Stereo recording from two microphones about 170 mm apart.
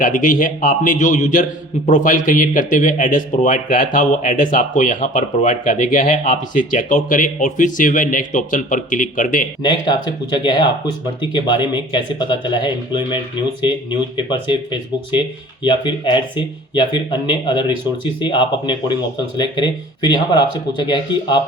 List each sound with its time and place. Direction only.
0.0 s a man's voice: 50° left (ahead or behind)
9.6 s speech: 30° left (ahead or behind)